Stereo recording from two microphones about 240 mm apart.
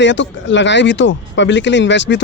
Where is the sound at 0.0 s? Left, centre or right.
Left.